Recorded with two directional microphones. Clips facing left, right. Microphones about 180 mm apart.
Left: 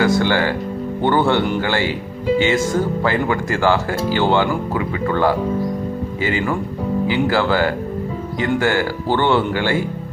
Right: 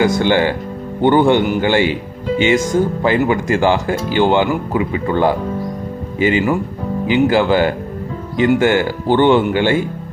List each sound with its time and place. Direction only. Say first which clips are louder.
0.0 s music: right 3 dB; 20° right (ahead or behind)
1.0 s speech: right 5 dB; 15° right (ahead or behind)